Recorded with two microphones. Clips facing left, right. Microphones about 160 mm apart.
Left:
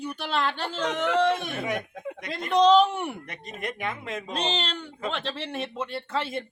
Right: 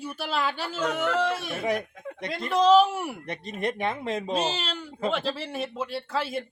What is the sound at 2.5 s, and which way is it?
Speech, 5° right (ahead or behind).